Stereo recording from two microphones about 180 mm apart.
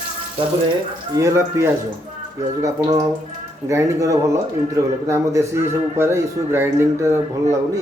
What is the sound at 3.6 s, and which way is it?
Speech, 20° right (ahead or behind).